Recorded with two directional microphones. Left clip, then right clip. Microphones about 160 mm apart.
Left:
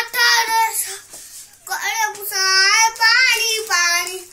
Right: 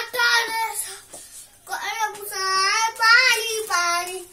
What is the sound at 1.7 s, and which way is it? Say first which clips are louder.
Child singing: left 5 dB; 15° right (ahead or behind).